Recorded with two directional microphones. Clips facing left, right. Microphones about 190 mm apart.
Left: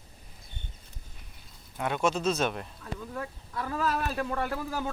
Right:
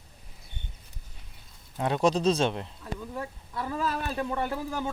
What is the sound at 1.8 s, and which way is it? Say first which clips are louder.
Speech: right 3 dB; 35° right (ahead or behind).